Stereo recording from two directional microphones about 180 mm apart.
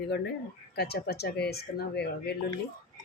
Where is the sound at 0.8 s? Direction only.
60° left (ahead or behind).